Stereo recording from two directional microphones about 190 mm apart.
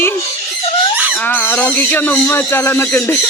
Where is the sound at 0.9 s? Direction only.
10° right (ahead or behind).